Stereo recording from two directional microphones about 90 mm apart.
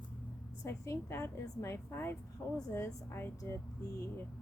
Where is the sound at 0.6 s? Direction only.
30° left (ahead or behind).